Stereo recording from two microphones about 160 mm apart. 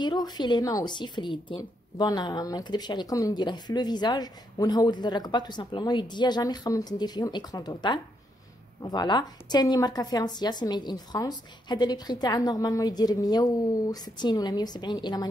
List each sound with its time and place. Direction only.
0.0 s a woman's voice: 25° left (ahead or behind)